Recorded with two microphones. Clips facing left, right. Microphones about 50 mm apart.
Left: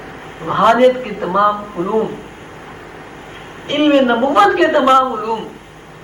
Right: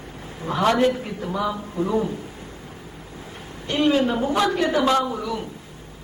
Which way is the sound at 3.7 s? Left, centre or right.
Left.